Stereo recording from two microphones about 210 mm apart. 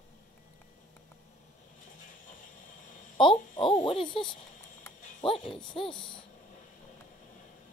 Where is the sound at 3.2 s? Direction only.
25° left (ahead or behind).